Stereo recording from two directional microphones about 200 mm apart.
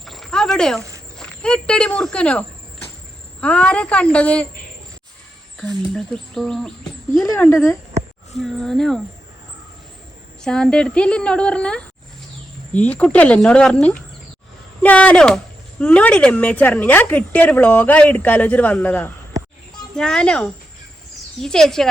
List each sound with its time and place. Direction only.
0.0 s a sound: centre (ahead or behind)
0.8 s walk: 15° right (ahead or behind)
1.2 s speech: 5° left (ahead or behind)
3.4 s a woman's voice: 5° left (ahead or behind)
5.5 s a woman's voice: 5° left (ahead or behind)
10.4 s a woman's voice: 5° left (ahead or behind)